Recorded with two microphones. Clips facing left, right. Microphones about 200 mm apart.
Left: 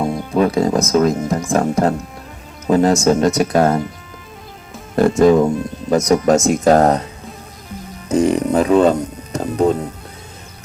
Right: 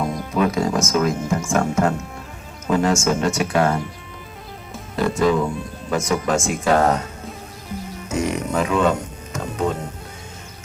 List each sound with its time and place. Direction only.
0.3 s speech: 35° left (ahead or behind)
4.9 s speech: 45° left (ahead or behind)
8.1 s music: 35° left (ahead or behind)